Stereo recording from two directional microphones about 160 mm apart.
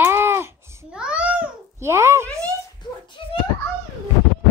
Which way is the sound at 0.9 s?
5° right (ahead or behind).